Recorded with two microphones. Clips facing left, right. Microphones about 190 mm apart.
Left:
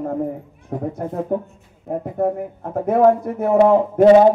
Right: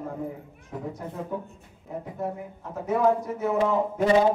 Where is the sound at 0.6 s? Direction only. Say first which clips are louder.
Left 9 dB; 55° left (ahead or behind).